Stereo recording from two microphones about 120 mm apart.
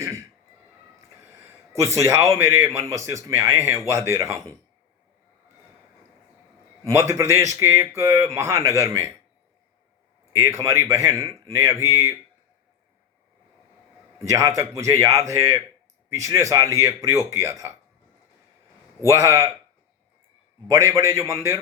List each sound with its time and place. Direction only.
1.5 s a man's voice: 25° right (ahead or behind)
6.8 s a man's voice: 25° right (ahead or behind)
10.3 s a man's voice: 25° right (ahead or behind)
14.2 s a man's voice: 25° right (ahead or behind)
19.0 s a man's voice: 25° right (ahead or behind)
20.7 s a man's voice: 25° right (ahead or behind)